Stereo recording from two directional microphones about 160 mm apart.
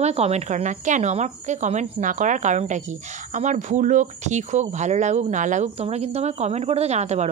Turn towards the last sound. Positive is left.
turn(degrees=-45)  # may be behind; listen again after turning